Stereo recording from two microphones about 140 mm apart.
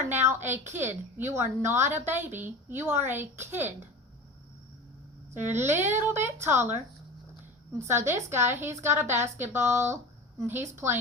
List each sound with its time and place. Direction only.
0.1 s a woman's voice: 15° right (ahead or behind)
5.3 s a woman's voice: 15° right (ahead or behind)
7.9 s a woman's voice: 20° right (ahead or behind)